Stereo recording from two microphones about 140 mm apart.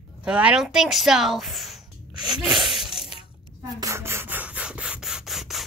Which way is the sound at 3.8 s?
20° right (ahead or behind).